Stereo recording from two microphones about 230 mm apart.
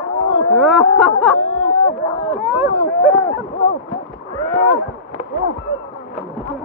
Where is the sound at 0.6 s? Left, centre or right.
Centre.